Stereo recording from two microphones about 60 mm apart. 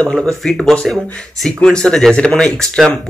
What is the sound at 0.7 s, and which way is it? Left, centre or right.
Speech, centre.